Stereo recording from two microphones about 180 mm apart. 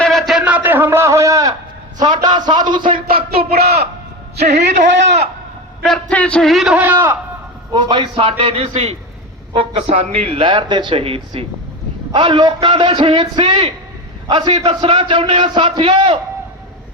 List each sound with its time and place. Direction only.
0.0 s a sound: centre (ahead or behind); by 1.5 s 20° right (ahead or behind)
2.0 s a man's voice: 25° right (ahead or behind)
3.5 s speech: 60° right (ahead or behind)
4.4 s a man's voice: 40° right (ahead or behind)
5.8 s a man's voice: 5° left (ahead or behind); by 7.2 s 10° right (ahead or behind)
7.7 s a man's voice: 25° right (ahead or behind)